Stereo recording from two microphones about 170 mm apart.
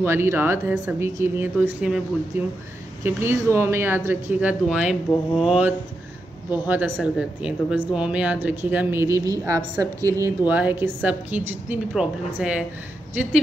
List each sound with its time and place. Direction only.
0.0 s speech: 15° right (ahead or behind)
3.0 s a woman's voice: 15° right (ahead or behind)